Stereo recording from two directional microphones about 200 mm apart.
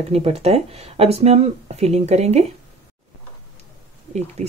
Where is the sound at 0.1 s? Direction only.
30° right (ahead or behind).